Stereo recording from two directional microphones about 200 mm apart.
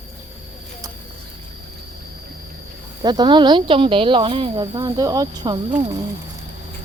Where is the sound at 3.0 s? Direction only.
20° right (ahead or behind).